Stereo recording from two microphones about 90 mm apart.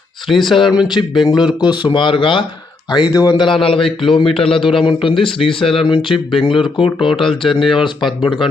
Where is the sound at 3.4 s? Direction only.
75° left (ahead or behind).